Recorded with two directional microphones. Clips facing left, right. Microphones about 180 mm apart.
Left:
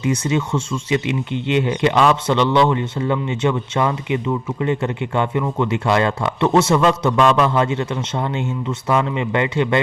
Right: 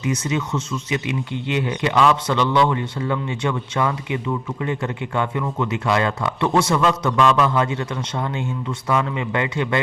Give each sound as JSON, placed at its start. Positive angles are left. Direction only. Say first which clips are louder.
{"t": 0.0, "sound": "speech", "louder": "left 3 dB", "side_deg": 30}